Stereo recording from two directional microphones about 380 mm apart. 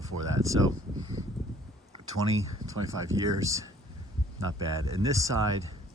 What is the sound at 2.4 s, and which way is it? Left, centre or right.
Speech, centre.